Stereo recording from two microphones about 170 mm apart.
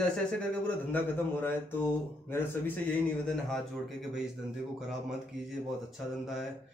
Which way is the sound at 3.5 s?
Centre (ahead or behind).